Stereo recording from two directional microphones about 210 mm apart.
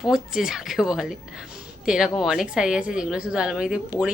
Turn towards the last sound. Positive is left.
turn(degrees=-5)  # may be behind; listen again after turning